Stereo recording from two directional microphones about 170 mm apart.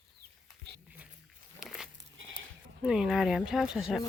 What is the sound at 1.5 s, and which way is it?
Dog, 5° right (ahead or behind).